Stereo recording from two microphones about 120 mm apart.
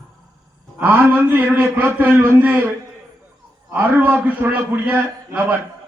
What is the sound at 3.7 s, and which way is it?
A man's voice, 15° right (ahead or behind).